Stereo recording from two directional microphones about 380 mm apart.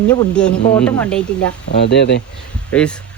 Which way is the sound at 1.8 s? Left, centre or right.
Left.